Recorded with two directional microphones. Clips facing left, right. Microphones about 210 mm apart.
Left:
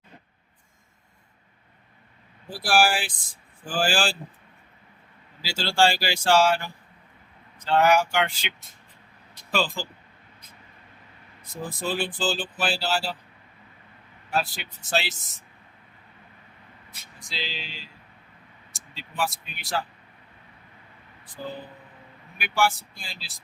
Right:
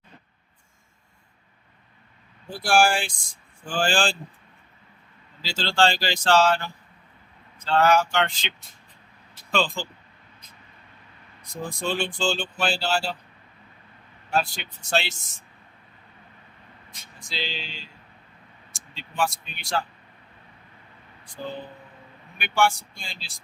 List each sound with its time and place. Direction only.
2.5 s speech: 5° left (ahead or behind)
5.4 s speech: 10° left (ahead or behind)
11.4 s speech: 5° left (ahead or behind)
14.3 s speech: centre (ahead or behind)
16.9 s speech: centre (ahead or behind)
22.4 s speech: 5° left (ahead or behind)